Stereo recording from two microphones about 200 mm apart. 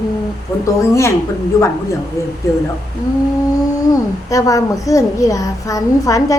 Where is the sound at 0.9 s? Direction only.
15° left (ahead or behind).